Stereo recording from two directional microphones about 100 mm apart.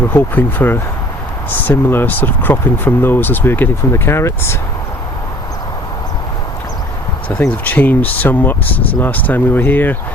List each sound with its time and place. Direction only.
0.1 s speech: 20° left (ahead or behind)
7.3 s speech: 15° left (ahead or behind)